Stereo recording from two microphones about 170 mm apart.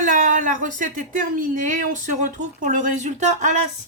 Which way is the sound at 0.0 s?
50° right (ahead or behind).